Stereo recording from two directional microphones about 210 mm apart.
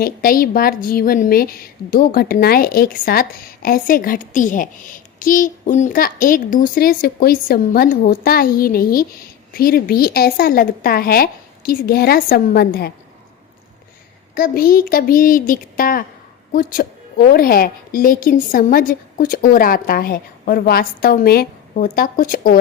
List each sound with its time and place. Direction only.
0.0 s a woman's voice: 45° left (ahead or behind)
14.3 s a woman's voice: 45° left (ahead or behind)